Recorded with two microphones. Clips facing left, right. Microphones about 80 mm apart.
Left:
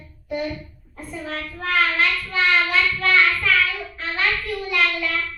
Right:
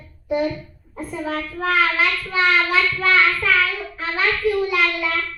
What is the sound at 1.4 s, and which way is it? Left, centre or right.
Child singing, centre.